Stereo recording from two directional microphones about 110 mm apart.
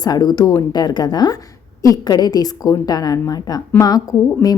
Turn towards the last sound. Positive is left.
turn(degrees=35)  # may be behind; listen again after turning